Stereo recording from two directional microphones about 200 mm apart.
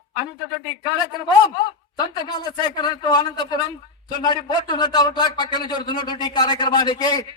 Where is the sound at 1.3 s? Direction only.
20° left (ahead or behind).